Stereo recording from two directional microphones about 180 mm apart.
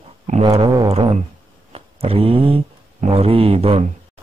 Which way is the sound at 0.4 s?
35° right (ahead or behind).